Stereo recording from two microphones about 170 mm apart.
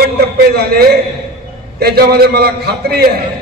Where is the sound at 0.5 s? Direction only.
65° right (ahead or behind).